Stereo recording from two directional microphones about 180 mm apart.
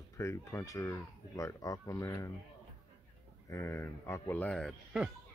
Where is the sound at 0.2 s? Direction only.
15° left (ahead or behind).